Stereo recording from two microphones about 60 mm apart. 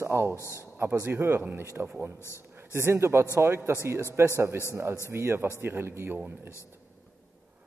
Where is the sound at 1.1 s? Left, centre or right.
Right.